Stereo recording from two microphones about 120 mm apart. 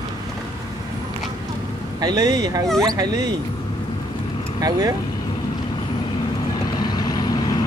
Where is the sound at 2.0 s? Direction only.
35° right (ahead or behind).